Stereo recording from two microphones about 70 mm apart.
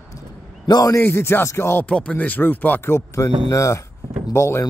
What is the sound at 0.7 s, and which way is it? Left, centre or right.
Speech, left.